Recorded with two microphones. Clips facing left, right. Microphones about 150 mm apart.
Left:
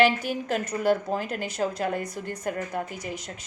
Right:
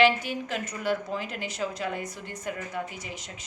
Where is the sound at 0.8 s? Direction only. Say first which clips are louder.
Left 5 dB; 45° left (ahead or behind).